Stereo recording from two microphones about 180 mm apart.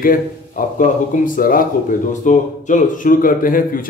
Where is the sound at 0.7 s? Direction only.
50° left (ahead or behind).